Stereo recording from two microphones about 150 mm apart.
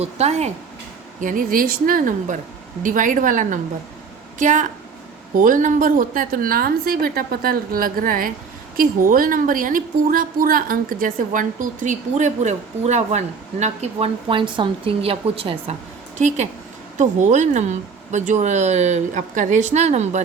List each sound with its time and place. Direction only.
0.0 s speech: 45° right (ahead or behind)
1.2 s a woman's voice: 65° right (ahead or behind); by 15.7 s 40° right (ahead or behind)
16.1 s speech: 50° right (ahead or behind)